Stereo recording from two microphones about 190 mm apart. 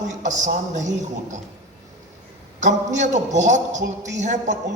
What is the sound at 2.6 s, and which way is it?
A man's voice, 40° right (ahead or behind).